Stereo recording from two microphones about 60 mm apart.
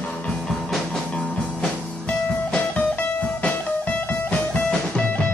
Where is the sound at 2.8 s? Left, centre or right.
Left.